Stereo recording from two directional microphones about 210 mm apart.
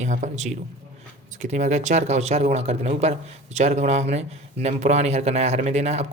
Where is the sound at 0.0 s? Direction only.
35° right (ahead or behind).